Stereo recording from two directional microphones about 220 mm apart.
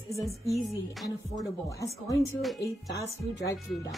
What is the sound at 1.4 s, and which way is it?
Speech, 15° left (ahead or behind).